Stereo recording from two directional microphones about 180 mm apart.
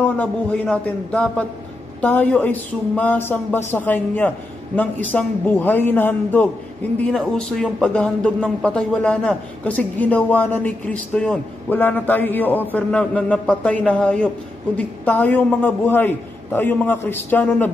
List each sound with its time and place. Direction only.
0.0 s speech: 10° left (ahead or behind)